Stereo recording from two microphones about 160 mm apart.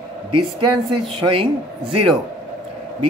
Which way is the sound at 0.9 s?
35° right (ahead or behind).